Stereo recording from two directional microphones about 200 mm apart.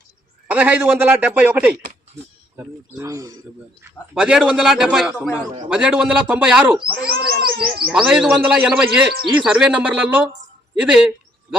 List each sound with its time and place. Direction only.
0.5 s speech: 5° right (ahead or behind)
4.1 s a man's voice: 5° right (ahead or behind)
7.0 s speech: 50° right (ahead or behind)
7.9 s a man's voice: 5° right (ahead or behind)